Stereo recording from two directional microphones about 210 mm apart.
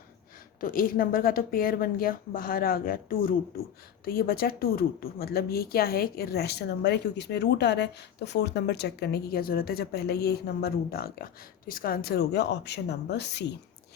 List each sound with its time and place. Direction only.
0.6 s a woman's voice: 40° left (ahead or behind)